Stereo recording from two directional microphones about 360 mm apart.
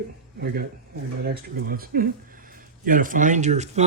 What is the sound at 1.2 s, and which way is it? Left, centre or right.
Speech, right.